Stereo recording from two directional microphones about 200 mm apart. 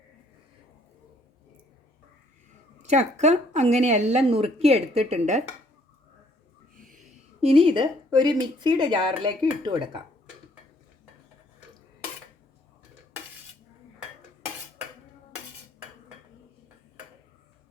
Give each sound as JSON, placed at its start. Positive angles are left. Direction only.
{"t": 2.8, "sound": "speech", "side_deg": -35}
{"t": 7.4, "sound": "speech", "side_deg": -25}